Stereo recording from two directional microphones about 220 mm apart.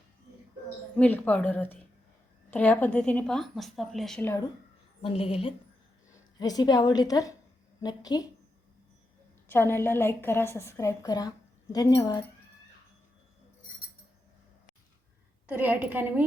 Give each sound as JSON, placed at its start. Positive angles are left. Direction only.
{"t": 0.9, "sound": "a woman's voice", "side_deg": 10}
{"t": 5.0, "sound": "a woman's voice", "side_deg": 25}
{"t": 9.5, "sound": "a woman's voice", "side_deg": 10}
{"t": 15.4, "sound": "a woman's voice", "side_deg": -5}